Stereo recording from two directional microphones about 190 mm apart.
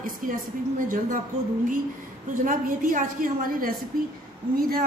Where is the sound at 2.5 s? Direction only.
45° right (ahead or behind).